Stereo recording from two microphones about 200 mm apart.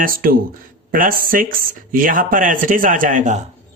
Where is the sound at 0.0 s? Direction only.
45° right (ahead or behind).